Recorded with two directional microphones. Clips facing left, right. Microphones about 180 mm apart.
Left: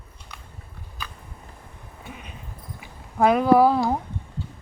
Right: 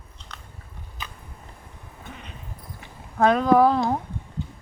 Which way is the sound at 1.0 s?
20° right (ahead or behind).